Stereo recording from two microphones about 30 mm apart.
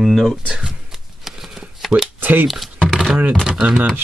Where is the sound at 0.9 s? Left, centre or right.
Centre.